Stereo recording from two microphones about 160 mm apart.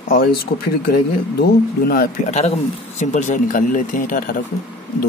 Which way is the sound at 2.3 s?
45° left (ahead or behind).